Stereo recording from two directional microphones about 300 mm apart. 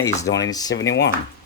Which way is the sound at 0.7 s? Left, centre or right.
Left.